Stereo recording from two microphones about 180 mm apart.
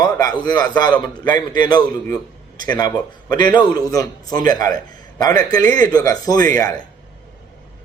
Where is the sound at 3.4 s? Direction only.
25° left (ahead or behind).